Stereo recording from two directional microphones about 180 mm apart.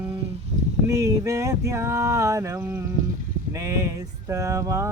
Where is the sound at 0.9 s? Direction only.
15° right (ahead or behind).